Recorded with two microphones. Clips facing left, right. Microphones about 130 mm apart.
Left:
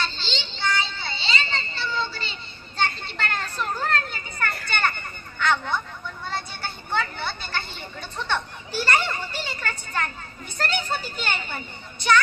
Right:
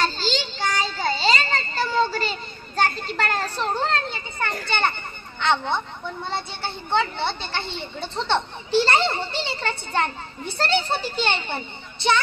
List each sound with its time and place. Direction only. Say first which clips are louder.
0.0 s a sound: right 7 dB; 40° right (ahead or behind); by 4.6 s 25° right (ahead or behind)
4.6 s children playing: right 2 dB; 25° right (ahead or behind)
5.4 s speech: right 2 dB; 25° right (ahead or behind)